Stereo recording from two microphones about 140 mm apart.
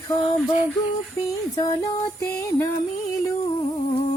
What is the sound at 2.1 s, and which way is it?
Music, 20° left (ahead or behind).